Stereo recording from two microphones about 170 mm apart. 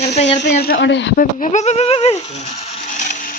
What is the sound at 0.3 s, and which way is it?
Speech, 80° left.